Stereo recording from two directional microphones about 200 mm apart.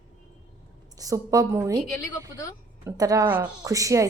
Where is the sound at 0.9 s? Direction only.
15° right (ahead or behind).